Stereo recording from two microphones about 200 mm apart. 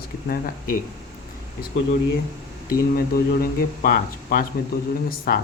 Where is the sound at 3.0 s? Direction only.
50° left (ahead or behind).